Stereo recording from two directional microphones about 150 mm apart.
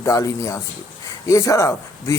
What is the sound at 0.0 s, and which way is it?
A man's voice, 20° left (ahead or behind).